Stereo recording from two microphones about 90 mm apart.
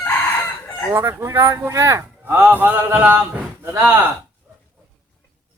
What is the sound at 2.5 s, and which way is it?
A man's voice, 20° right (ahead or behind).